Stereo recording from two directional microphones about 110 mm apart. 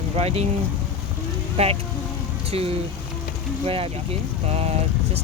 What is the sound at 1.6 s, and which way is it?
Speech, 65° right (ahead or behind).